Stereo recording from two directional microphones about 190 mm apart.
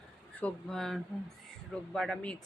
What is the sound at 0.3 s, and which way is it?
Speech, 5° left (ahead or behind).